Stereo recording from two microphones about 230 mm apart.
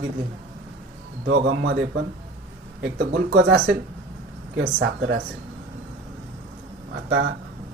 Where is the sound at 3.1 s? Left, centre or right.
Right.